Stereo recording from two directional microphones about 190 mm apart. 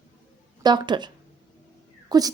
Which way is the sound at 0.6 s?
20° right (ahead or behind).